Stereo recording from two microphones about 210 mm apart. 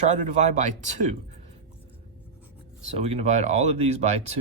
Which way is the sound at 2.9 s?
30° right (ahead or behind).